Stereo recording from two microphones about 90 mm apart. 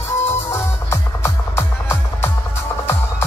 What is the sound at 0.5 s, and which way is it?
Music, 30° left (ahead or behind).